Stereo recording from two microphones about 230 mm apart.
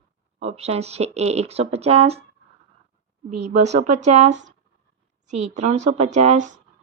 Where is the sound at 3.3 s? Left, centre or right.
Right.